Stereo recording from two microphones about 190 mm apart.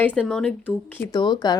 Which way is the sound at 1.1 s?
20° left (ahead or behind).